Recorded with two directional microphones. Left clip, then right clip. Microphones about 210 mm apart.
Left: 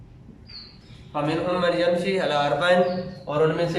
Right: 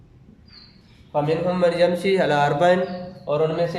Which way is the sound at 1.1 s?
30° right (ahead or behind).